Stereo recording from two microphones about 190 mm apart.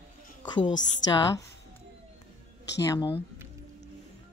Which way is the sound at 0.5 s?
20° left (ahead or behind).